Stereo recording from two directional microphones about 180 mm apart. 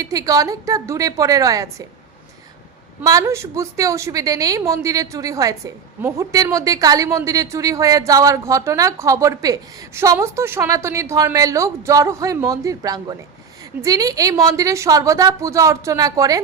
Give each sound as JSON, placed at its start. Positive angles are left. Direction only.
{"t": 0.0, "sound": "a woman's voice", "side_deg": -20}
{"t": 3.0, "sound": "a woman's voice", "side_deg": -20}